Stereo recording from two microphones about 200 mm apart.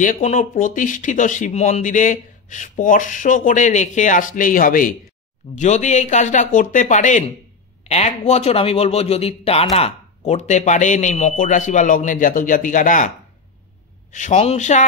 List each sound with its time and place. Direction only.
0.0 s speech: 35° left (ahead or behind)
14.1 s speech: 35° left (ahead or behind)